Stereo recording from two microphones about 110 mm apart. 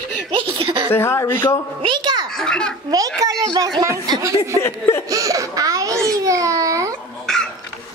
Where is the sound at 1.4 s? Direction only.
35° left (ahead or behind).